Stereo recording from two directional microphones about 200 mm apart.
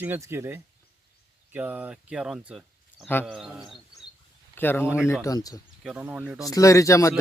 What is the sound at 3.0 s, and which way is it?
Speech, 10° left (ahead or behind).